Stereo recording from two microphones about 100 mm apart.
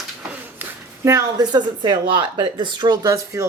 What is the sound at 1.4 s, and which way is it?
A woman's voice, 45° right (ahead or behind).